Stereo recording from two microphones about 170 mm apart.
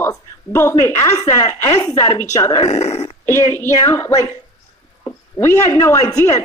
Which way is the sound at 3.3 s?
15° left (ahead or behind).